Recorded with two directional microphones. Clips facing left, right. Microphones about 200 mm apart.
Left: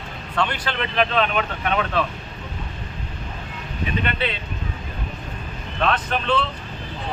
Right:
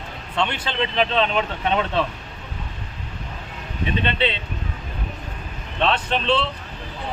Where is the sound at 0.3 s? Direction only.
25° right (ahead or behind).